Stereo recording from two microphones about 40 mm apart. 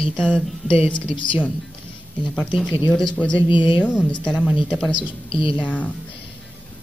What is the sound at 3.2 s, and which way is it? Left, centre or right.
A woman's voice, left.